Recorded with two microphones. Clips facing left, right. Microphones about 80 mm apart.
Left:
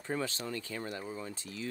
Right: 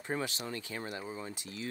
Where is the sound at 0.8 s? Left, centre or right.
Centre.